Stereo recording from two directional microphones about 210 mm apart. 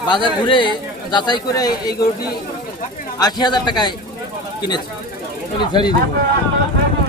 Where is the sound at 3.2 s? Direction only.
20° left (ahead or behind).